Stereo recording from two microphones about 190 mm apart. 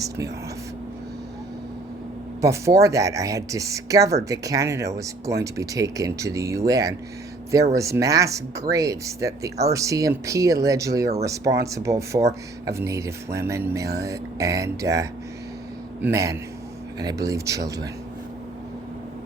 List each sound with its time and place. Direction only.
2.4 s speech: 15° right (ahead or behind)